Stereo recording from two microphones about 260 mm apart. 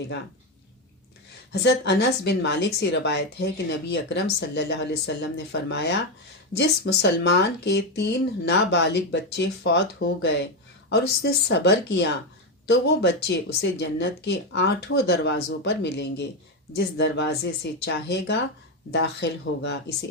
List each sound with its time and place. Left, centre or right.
1.6 s a woman's voice: left